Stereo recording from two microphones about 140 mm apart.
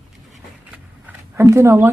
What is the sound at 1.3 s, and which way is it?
Speech, 20° right (ahead or behind).